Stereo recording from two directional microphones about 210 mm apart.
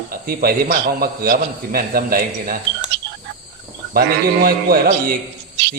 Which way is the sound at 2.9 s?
55° right (ahead or behind).